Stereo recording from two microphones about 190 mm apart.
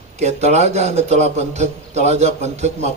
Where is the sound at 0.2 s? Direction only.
35° right (ahead or behind).